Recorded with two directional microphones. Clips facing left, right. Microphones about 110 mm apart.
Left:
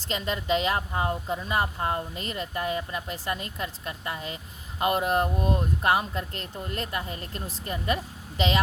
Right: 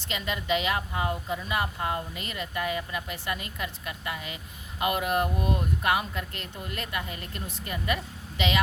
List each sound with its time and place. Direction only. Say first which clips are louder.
0.0 s a woman's voice: left 3 dB; 35° left (ahead or behind)